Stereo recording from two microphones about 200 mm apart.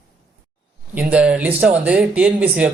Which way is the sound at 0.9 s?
5° right (ahead or behind).